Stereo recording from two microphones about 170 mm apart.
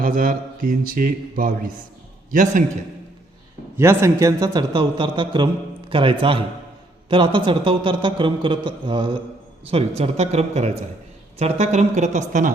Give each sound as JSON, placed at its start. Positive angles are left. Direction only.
{"t": 0.0, "sound": "a man's voice", "side_deg": -55}
{"t": 3.8, "sound": "a man's voice", "side_deg": -15}